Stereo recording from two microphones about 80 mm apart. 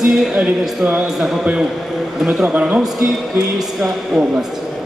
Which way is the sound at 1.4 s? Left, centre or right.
Centre.